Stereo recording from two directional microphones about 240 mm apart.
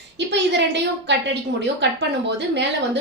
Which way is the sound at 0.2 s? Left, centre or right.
Right.